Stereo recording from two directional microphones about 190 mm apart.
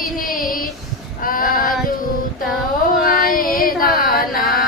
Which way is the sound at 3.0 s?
50° left (ahead or behind).